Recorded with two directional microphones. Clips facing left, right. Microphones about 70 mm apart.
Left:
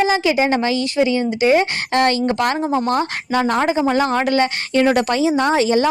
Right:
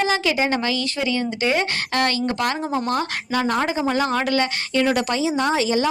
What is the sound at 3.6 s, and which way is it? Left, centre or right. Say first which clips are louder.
Speech: left 4 dB; left.